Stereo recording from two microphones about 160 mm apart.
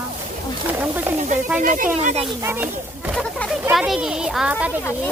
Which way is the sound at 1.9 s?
40° right (ahead or behind).